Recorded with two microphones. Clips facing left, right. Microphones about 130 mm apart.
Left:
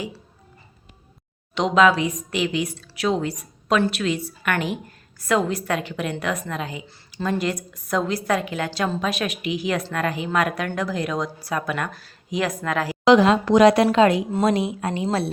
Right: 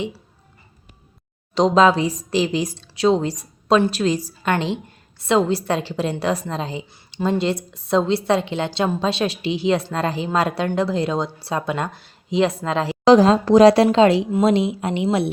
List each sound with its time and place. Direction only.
1.5 s a woman's voice: 35° right (ahead or behind); by 15.3 s 20° right (ahead or behind)